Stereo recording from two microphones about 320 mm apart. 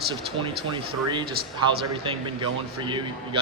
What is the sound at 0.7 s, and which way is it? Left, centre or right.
Speech, centre.